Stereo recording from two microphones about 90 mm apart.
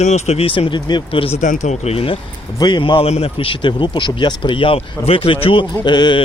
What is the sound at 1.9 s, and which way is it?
Speech, 90° left.